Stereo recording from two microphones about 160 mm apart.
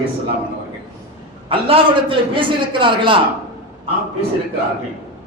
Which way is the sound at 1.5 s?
35° right (ahead or behind).